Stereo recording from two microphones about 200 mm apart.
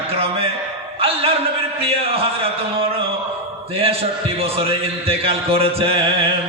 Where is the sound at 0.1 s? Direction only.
30° right (ahead or behind).